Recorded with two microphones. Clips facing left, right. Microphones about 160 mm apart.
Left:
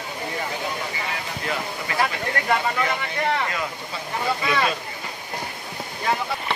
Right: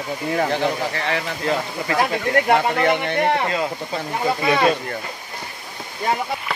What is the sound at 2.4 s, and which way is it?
Speech, 65° right (ahead or behind).